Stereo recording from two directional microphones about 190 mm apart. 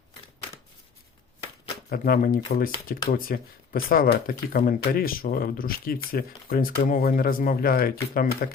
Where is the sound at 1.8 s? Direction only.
50° left (ahead or behind).